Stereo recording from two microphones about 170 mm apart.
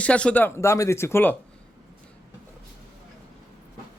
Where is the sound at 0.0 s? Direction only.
5° left (ahead or behind).